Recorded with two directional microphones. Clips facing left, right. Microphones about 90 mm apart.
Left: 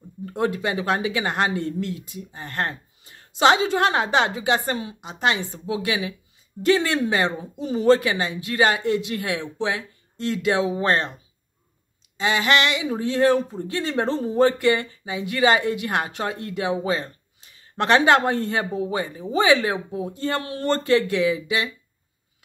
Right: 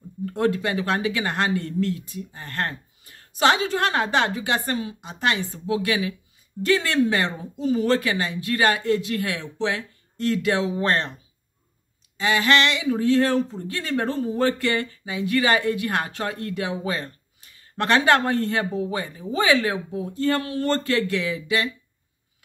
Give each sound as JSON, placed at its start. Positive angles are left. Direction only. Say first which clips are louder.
{"t": 0.2, "sound": "speech", "louder": "right 1 dB", "side_deg": 15}
{"t": 12.2, "sound": "speech", "louder": "even", "side_deg": 20}